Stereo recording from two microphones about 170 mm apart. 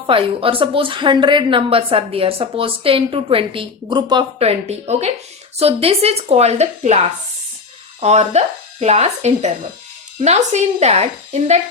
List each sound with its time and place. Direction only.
0.1 s speech: 30° right (ahead or behind)